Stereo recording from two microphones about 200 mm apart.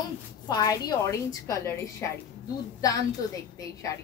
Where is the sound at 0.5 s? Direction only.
20° left (ahead or behind).